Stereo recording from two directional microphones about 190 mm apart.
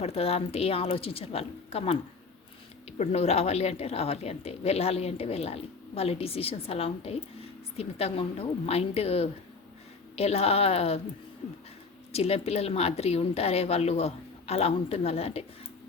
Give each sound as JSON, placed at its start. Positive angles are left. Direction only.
{"t": 0.0, "sound": "a woman's voice", "side_deg": 30}
{"t": 3.0, "sound": "a woman's voice", "side_deg": 35}
{"t": 12.1, "sound": "a woman's voice", "side_deg": 35}